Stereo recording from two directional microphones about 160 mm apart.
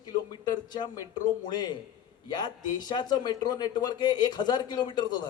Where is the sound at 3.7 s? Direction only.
25° left (ahead or behind).